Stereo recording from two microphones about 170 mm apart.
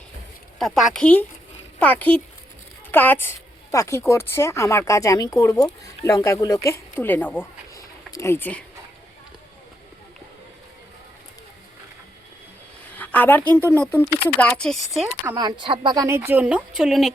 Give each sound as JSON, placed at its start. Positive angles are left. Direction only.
{"t": 0.6, "sound": "a woman's voice", "side_deg": 5}
{"t": 12.9, "sound": "speech", "side_deg": 10}
{"t": 15.6, "sound": "speech", "side_deg": -30}
{"t": 16.0, "sound": "speech", "side_deg": -15}